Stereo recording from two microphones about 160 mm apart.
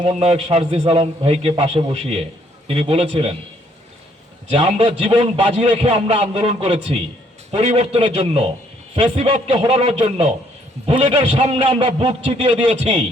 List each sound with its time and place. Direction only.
0.0 s a man's voice: 40° right (ahead or behind)
4.5 s a man's voice: 40° right (ahead or behind)